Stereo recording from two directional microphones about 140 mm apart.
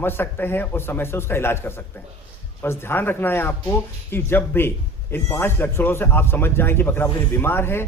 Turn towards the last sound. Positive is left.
turn(degrees=15)  # may be behind; listen again after turning